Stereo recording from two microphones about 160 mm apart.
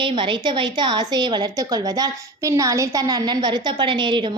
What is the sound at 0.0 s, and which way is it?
A woman's voice, 30° right (ahead or behind).